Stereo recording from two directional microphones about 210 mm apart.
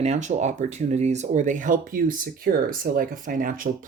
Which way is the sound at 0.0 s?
30° right (ahead or behind).